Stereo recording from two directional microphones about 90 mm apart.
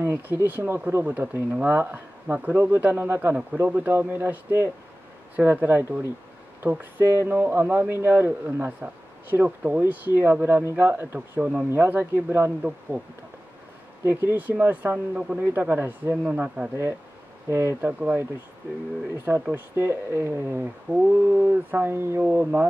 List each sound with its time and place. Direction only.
0.0 s speech: 20° right (ahead or behind)
14.0 s speech: 20° right (ahead or behind)
17.5 s speech: 30° right (ahead or behind)
17.7 s speech: 20° right (ahead or behind)
22.3 s speech: 15° right (ahead or behind)